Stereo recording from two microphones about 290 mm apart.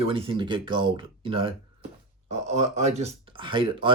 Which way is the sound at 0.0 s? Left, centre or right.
Centre.